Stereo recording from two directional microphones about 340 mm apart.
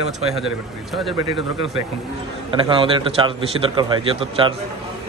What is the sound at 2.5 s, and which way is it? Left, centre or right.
A man's voice, centre.